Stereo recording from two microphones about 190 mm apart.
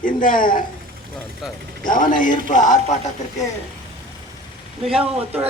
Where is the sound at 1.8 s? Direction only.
45° left (ahead or behind).